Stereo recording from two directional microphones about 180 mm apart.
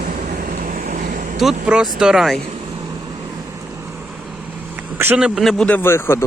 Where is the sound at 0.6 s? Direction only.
50° right (ahead or behind).